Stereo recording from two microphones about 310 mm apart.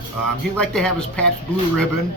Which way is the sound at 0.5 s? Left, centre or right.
Centre.